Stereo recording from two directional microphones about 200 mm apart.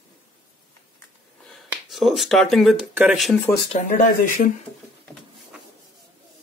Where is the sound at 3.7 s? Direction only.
40° left (ahead or behind).